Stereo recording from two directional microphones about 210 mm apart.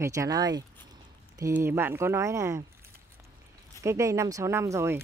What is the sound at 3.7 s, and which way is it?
Speech, 15° right (ahead or behind).